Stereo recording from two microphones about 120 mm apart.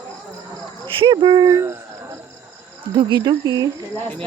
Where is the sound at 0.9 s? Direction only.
45° right (ahead or behind); by 1.8 s 25° right (ahead or behind).